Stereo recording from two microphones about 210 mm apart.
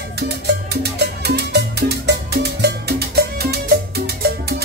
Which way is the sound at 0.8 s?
50° right (ahead or behind).